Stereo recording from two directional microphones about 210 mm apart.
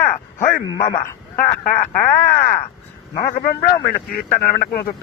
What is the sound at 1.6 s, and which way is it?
Speech, 40° left (ahead or behind).